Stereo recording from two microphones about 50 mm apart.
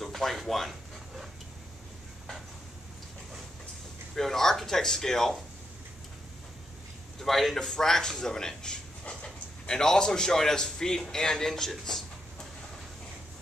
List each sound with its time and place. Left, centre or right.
0.0 s dog: centre
4.1 s a man's voice: centre
7.2 s a man's voice: centre